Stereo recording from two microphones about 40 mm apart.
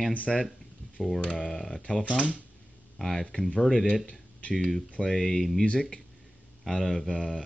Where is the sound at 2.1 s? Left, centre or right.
Right.